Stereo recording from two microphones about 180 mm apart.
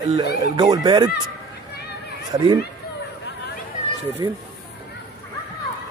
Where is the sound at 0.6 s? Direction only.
25° right (ahead or behind).